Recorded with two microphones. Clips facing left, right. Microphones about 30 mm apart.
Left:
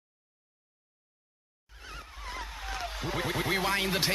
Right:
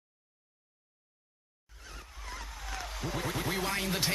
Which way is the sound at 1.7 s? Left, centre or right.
Left.